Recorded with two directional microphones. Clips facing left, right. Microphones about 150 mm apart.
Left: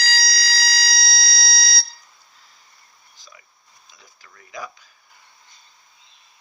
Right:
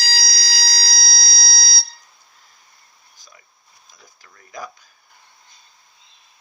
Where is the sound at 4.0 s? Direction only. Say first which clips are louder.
Right 1 dB; 40° right (ahead or behind).